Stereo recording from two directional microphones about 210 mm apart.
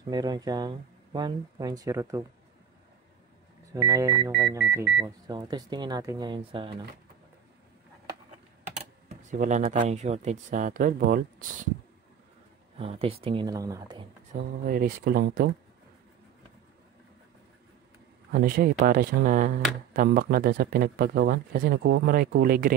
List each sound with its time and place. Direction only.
0.0 s speech: 20° right (ahead or behind)
3.7 s speech: 15° right (ahead or behind)
5.2 s speech: 20° right (ahead or behind)
8.7 s speech: 35° right (ahead or behind)
12.7 s speech: 25° right (ahead or behind)
14.7 s speech: 45° right (ahead or behind)
18.3 s speech: 45° right (ahead or behind)